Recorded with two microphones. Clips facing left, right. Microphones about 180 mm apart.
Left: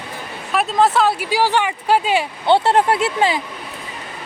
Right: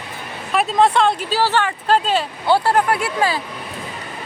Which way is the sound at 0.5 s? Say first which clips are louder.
Even; centre (ahead or behind).